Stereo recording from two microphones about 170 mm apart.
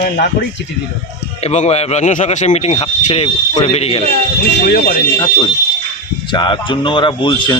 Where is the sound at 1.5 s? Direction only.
40° left (ahead or behind).